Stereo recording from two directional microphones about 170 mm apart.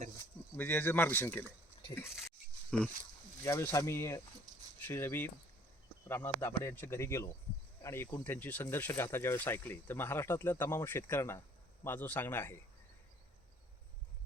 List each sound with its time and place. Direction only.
0.5 s speech: 10° left (ahead or behind)
2.6 s speech: 5° left (ahead or behind)
3.4 s speech: 15° left (ahead or behind)